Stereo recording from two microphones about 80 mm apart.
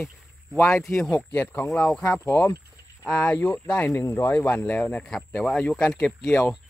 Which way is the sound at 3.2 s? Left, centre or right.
Centre.